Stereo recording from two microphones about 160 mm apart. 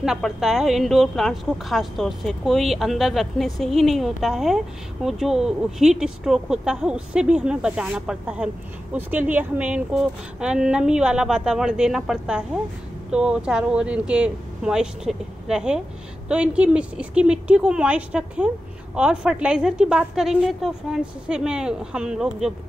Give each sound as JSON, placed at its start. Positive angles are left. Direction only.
{"t": 0.0, "sound": "a woman's voice", "side_deg": -5}